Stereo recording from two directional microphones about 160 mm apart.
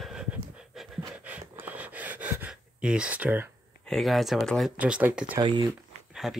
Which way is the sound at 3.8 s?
Centre (ahead or behind).